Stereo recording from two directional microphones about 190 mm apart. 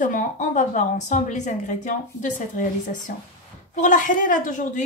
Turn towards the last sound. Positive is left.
turn(degrees=40)  # may be behind; listen again after turning